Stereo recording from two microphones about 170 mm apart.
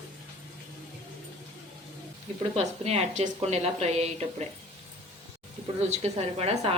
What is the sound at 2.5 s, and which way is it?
A woman's voice, 35° right (ahead or behind).